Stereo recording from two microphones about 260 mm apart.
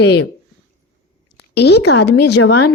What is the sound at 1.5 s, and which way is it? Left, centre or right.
Speech, left.